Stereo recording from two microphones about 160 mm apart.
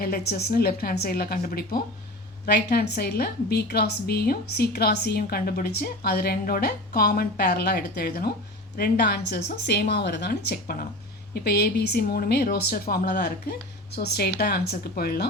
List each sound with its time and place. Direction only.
0.0 s a woman's voice: 80° left
2.5 s a woman's voice: 85° left